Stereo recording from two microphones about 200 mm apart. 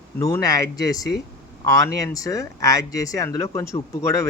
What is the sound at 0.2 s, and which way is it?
Speech, 15° left (ahead or behind).